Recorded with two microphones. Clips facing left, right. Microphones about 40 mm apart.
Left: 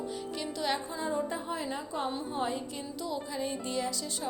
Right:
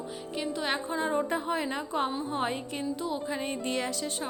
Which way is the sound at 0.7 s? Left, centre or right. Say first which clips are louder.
Right 6 dB; right.